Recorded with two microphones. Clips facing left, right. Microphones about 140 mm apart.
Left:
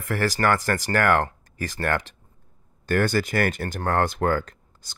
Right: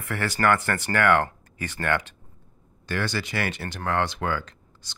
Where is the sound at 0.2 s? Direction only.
35° left (ahead or behind).